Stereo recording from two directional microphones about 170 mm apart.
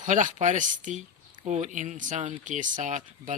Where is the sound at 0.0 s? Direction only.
50° right (ahead or behind).